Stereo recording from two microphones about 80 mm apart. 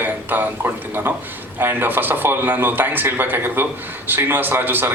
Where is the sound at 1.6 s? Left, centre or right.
Right.